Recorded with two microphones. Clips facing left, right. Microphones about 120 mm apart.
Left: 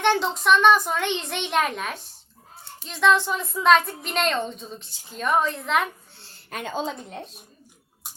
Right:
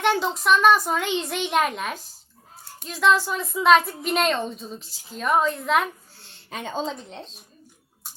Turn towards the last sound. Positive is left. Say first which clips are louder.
# left 1 dB
turn(degrees=10)  # may be behind; listen again after turning